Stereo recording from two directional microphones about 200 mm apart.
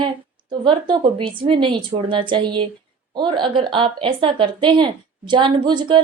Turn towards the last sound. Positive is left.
turn(degrees=-25)  # may be behind; listen again after turning